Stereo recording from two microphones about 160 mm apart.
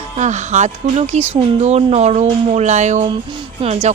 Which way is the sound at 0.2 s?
50° right (ahead or behind).